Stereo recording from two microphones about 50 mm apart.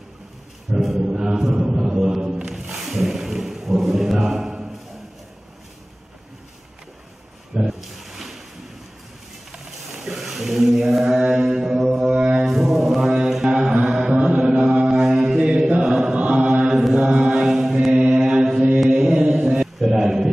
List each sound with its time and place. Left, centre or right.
0.7 s chant: centre
7.8 s a sound: centre
10.0 s a sound: centre
11.1 s music: centre
14.9 s mantra: centre
15.9 s chant: centre
16.2 s mantra: right